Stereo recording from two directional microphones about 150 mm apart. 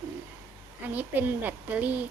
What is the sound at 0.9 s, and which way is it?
Speech, 10° right (ahead or behind).